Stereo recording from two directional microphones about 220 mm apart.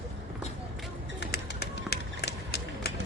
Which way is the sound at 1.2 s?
45° left (ahead or behind).